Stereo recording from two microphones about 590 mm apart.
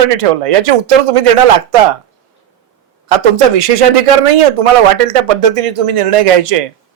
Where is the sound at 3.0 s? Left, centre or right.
Right.